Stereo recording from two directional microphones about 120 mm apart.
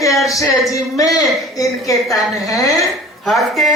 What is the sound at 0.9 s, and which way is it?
Speech, 30° left (ahead or behind).